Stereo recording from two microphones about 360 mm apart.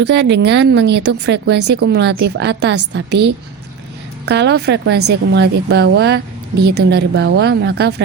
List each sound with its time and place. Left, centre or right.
0.0 s a woman's voice: right